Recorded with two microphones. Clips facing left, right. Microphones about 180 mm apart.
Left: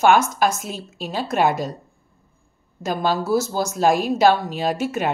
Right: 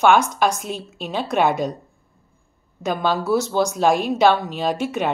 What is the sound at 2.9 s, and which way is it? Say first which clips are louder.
Speech: even; 40° left (ahead or behind).